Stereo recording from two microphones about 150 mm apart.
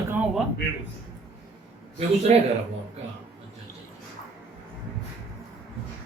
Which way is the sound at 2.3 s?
45° right (ahead or behind).